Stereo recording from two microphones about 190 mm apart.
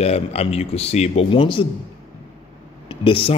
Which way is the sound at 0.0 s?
35° left (ahead or behind).